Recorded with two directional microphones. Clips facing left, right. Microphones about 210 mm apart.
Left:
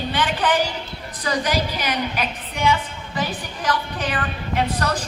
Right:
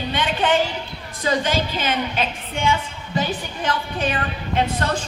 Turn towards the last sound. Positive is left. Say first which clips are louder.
# right 1 dB
turn(degrees=-25)  # may be behind; listen again after turning